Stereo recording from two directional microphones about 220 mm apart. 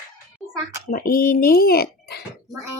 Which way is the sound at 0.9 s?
40° left (ahead or behind).